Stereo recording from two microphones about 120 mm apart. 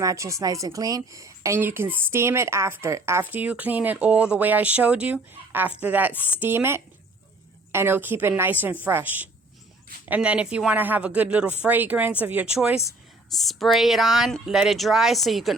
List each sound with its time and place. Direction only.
0.0 s a woman's voice: 25° right (ahead or behind); by 12.7 s 10° right (ahead or behind)
13.3 s speech: centre (ahead or behind)